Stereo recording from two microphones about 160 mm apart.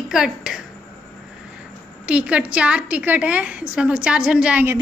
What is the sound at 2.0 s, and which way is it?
A woman's voice, 5° right (ahead or behind).